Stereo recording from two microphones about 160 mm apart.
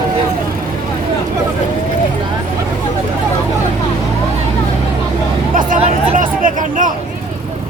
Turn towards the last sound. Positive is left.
turn(degrees=-55)  # may be behind; listen again after turning